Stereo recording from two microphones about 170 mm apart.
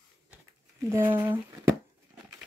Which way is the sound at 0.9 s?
15° right (ahead or behind).